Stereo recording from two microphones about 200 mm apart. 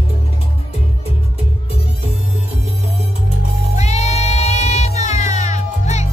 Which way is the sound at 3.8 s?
35° left (ahead or behind).